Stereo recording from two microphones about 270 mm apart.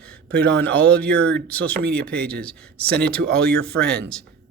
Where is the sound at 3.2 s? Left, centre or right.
Right.